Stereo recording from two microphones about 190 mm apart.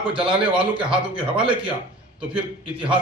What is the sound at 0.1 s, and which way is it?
A man's voice, 25° right (ahead or behind).